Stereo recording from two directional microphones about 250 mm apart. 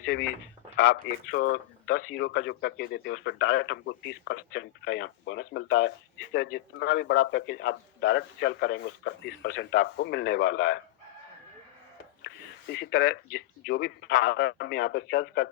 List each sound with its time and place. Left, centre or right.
0.8 s a man's voice: left
12.3 s a sound: left
12.7 s a man's voice: left